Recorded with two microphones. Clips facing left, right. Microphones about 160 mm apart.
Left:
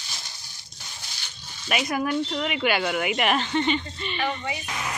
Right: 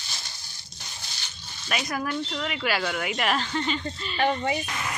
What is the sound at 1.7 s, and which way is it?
Speech, 10° left (ahead or behind).